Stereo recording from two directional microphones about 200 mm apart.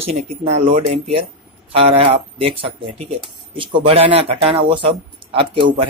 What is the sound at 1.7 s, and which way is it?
Speech, 30° right (ahead or behind).